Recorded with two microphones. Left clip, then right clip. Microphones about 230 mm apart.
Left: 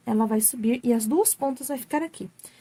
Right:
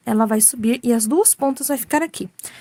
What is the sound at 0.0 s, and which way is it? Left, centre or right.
A woman's voice, right.